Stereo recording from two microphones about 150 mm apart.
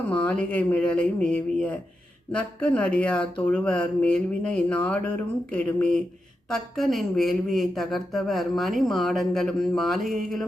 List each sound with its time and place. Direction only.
0.1 s a woman's voice: 10° left (ahead or behind)